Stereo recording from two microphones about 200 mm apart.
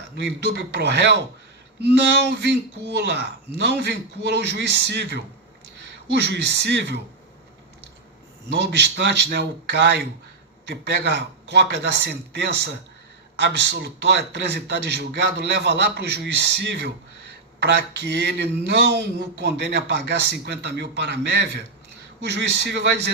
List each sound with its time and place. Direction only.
0.2 s a man's voice: 60° right (ahead or behind)
8.5 s a man's voice: 55° right (ahead or behind)